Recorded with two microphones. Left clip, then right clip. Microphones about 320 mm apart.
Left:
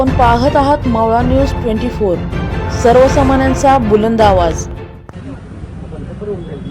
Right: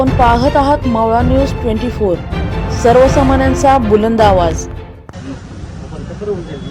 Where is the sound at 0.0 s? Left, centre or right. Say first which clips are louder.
Even; centre.